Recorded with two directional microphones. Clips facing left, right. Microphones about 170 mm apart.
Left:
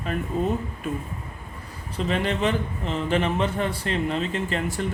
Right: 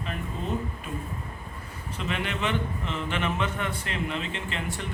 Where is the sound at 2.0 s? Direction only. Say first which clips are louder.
Left 6 dB; 35° left (ahead or behind).